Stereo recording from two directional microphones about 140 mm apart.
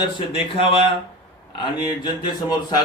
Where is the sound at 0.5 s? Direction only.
40° left (ahead or behind).